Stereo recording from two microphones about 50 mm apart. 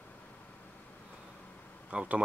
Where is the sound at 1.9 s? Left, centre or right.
Right.